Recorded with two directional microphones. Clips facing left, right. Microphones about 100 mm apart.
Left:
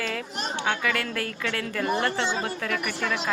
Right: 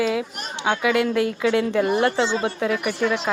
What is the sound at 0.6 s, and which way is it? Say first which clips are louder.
A woman's voice: right 8 dB; 15° right (ahead or behind).